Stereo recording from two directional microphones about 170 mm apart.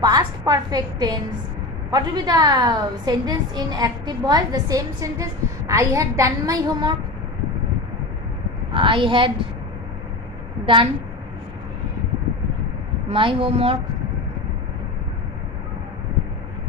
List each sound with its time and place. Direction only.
0.0 s a woman's voice: 25° right (ahead or behind)
8.7 s a woman's voice: 30° right (ahead or behind)
13.1 s a woman's voice: 30° right (ahead or behind)